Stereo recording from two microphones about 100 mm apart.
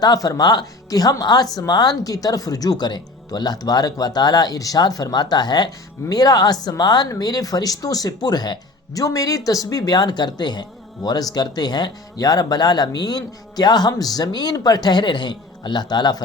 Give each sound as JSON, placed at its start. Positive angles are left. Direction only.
{"t": 0.0, "sound": "speech", "side_deg": 40}